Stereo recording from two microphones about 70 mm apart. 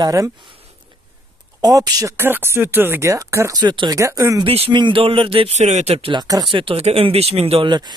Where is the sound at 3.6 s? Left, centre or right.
Right.